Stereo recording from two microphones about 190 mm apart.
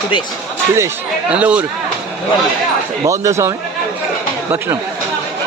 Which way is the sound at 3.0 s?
15° right (ahead or behind).